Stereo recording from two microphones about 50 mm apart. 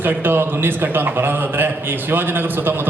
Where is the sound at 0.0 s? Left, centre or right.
Right.